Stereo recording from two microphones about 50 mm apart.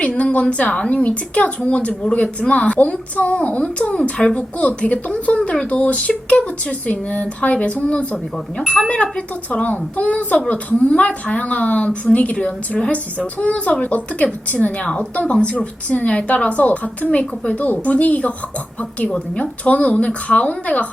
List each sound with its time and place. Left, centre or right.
0.2 s a woman's voice: left